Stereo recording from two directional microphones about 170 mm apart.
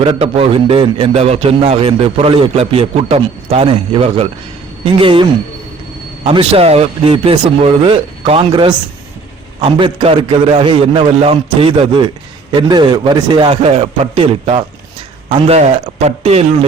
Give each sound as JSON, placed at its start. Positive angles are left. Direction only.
{"t": 0.0, "sound": "a man's voice", "side_deg": -35}